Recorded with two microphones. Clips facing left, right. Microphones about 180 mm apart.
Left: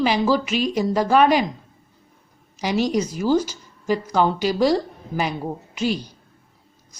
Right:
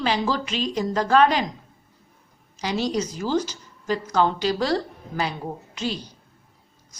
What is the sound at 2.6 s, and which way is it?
A woman's voice, 15° left (ahead or behind).